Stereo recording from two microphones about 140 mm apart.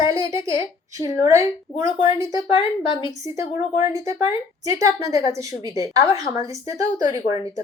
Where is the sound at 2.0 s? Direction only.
25° right (ahead or behind).